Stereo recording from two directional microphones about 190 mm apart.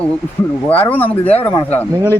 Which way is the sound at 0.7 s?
10° left (ahead or behind).